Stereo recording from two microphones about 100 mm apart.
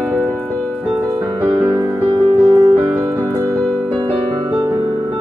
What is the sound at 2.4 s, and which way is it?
Music, 40° right (ahead or behind).